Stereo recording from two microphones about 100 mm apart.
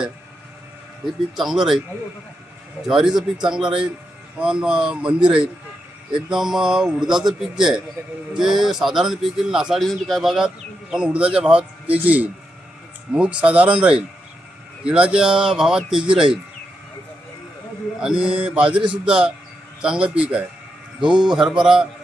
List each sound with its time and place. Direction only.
1.4 s speech: 5° right (ahead or behind)
2.8 s speech: 5° right (ahead or behind)
6.1 s speech: 5° right (ahead or behind)
8.0 s speech: 20° right (ahead or behind)
8.3 s speech: 5° right (ahead or behind)
18.0 s speech: 10° right (ahead or behind)